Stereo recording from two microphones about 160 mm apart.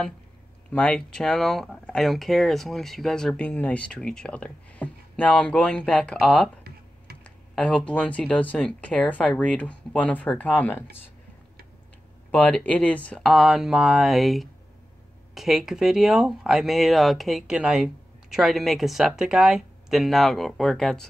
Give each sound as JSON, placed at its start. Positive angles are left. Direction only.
{"t": 0.7, "sound": "speech", "side_deg": 10}
{"t": 12.3, "sound": "speech", "side_deg": 10}